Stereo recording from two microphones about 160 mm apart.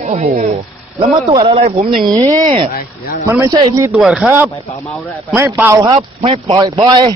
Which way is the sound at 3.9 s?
5° right (ahead or behind).